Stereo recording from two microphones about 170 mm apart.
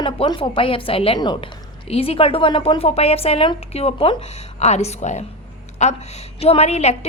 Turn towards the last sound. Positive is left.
turn(degrees=40)  # may be behind; listen again after turning